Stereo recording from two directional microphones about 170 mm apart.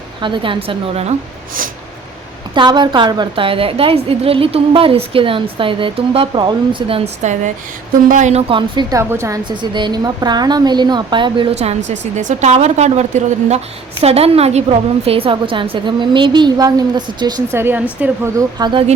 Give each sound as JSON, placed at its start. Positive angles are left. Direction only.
{"t": 0.2, "sound": "a woman's voice", "side_deg": -30}
{"t": 2.6, "sound": "a woman's voice", "side_deg": -25}
{"t": 9.4, "sound": "a woman's voice", "side_deg": -25}
{"t": 18.6, "sound": "a woman's voice", "side_deg": -30}